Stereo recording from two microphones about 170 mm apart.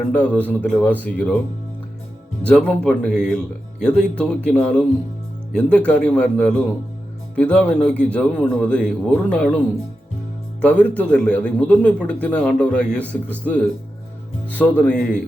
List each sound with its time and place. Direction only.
0.1 s speech: 10° left (ahead or behind)
2.4 s speech: 5° left (ahead or behind)
10.6 s speech: 10° left (ahead or behind)